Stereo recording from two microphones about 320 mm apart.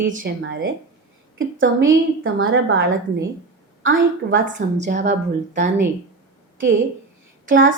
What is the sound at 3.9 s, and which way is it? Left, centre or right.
A woman's voice, right.